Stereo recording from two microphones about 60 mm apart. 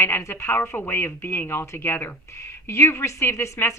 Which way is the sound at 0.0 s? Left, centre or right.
Left.